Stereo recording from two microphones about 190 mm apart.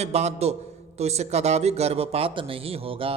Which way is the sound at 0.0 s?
35° right (ahead or behind).